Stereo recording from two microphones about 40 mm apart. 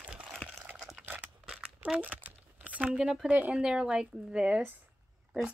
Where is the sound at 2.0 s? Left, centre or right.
Right.